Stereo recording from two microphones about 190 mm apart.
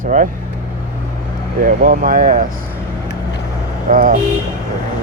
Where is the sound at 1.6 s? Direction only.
45° right (ahead or behind).